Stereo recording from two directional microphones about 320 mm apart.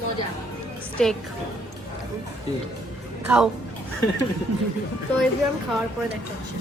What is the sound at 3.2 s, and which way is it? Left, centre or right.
Speech, centre.